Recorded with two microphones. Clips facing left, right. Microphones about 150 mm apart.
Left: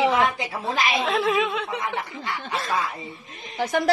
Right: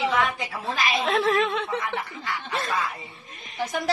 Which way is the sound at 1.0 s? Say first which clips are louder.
Right 2 dB; centre (ahead or behind).